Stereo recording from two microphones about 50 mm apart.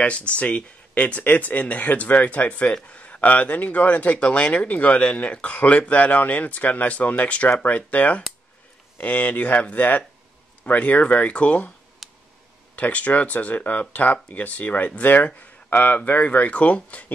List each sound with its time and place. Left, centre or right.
0.0 s speech: left
12.0 s a sound: centre
12.7 s speech: left